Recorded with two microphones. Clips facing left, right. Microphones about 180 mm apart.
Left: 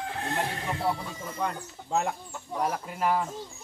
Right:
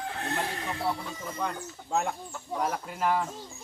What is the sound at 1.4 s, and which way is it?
Speech, 5° left (ahead or behind).